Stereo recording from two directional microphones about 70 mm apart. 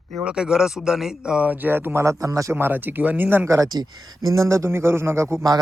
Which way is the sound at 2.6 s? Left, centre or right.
Right.